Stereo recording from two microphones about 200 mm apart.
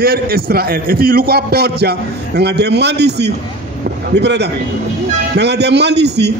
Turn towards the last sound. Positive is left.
turn(degrees=-55)  # may be behind; listen again after turning